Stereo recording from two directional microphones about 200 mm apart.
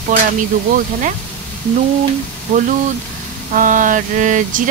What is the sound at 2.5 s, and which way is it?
Speech, 35° right (ahead or behind).